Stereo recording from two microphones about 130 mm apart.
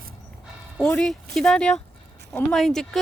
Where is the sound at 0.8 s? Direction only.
5° left (ahead or behind).